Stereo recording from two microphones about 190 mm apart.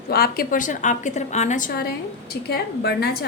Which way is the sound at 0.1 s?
50° left (ahead or behind).